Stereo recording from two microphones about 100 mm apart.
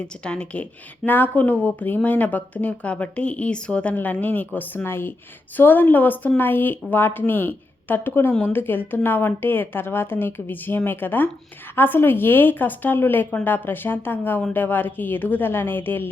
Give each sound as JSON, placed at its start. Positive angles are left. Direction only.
{"t": 0.0, "sound": "speech", "side_deg": 10}